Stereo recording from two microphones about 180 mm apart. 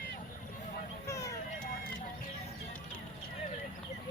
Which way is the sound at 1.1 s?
20° left (ahead or behind).